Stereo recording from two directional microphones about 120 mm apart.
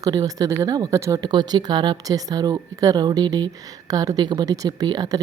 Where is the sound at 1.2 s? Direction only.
35° right (ahead or behind).